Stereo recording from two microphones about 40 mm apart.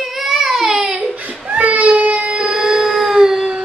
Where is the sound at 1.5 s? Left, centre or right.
Right.